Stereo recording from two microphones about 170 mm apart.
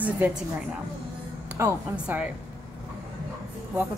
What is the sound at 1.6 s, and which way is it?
Speech, 15° right (ahead or behind).